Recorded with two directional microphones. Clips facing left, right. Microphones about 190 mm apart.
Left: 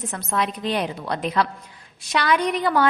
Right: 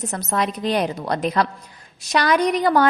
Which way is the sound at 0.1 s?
40° right (ahead or behind).